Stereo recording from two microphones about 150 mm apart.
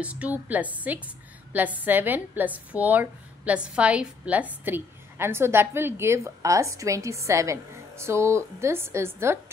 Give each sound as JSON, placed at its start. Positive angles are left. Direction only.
{"t": 0.0, "sound": "a woman's voice", "side_deg": -10}